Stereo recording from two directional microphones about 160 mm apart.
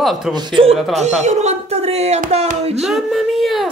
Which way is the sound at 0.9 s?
45° right (ahead or behind).